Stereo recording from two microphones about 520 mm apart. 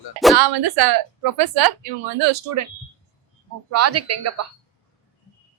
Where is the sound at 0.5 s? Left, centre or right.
Right.